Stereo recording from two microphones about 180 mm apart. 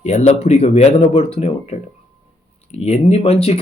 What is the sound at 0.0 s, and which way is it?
Speech, 40° left (ahead or behind).